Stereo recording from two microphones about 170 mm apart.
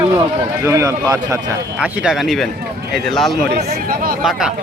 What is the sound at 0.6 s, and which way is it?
Speech, 20° right (ahead or behind).